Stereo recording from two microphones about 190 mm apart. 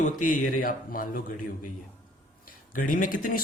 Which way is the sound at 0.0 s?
45° left (ahead or behind).